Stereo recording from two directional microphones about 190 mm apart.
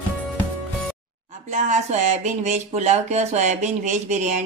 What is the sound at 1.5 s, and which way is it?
Speech, 40° right (ahead or behind).